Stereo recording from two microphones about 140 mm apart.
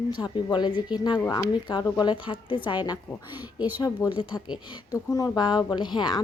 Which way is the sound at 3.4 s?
10° right (ahead or behind).